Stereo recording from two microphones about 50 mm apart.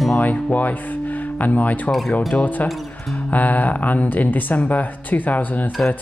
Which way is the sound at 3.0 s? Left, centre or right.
Left.